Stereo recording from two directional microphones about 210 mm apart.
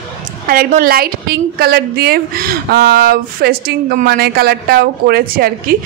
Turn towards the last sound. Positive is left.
turn(degrees=-45)  # may be behind; listen again after turning